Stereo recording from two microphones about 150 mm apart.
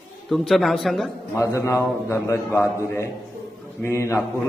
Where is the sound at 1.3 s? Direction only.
20° left (ahead or behind).